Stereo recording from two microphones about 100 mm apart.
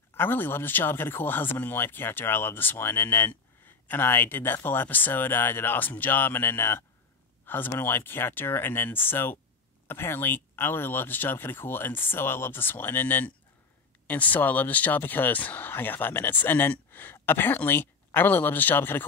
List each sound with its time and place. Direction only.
0.1 s speech: 20° left (ahead or behind)